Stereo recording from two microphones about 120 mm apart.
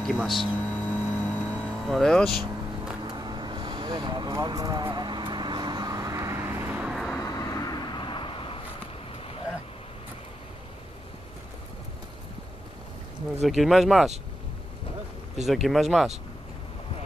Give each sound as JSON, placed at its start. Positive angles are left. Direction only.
{"t": 0.0, "sound": "speech", "side_deg": 5}
{"t": 0.7, "sound": "vehicle", "side_deg": 15}
{"t": 1.9, "sound": "speech", "side_deg": 0}
{"t": 3.1, "sound": "vehicle", "side_deg": -40}
{"t": 6.5, "sound": "vehicle", "side_deg": -15}
{"t": 7.2, "sound": "vehicle", "side_deg": 30}
{"t": 13.4, "sound": "speech", "side_deg": 0}
{"t": 15.4, "sound": "speech", "side_deg": 0}